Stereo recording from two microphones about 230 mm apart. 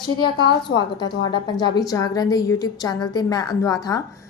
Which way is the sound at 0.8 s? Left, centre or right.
Centre.